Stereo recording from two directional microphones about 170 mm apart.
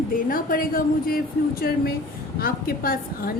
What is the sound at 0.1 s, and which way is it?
A woman's voice, 55° left (ahead or behind).